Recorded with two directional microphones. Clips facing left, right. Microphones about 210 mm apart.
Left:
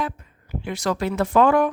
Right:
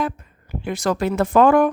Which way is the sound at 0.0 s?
45° right (ahead or behind).